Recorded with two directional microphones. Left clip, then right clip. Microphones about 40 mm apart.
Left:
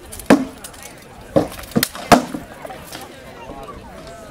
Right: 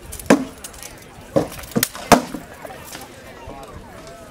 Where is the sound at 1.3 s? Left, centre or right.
Centre.